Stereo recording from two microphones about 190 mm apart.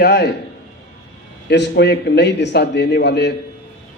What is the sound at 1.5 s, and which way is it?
Speech, 65° left (ahead or behind).